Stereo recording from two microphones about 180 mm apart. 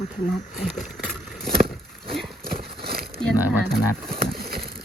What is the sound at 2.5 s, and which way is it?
Horse, 55° right (ahead or behind).